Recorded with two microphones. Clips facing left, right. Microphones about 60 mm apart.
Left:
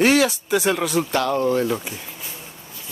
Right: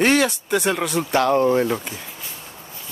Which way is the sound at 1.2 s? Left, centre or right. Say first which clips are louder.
Right 5 dB; right.